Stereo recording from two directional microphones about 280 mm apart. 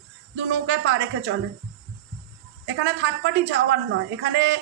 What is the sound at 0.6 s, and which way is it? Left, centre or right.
Speech, right.